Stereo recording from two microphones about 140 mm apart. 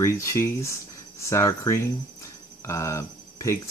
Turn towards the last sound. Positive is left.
turn(degrees=20)  # may be behind; listen again after turning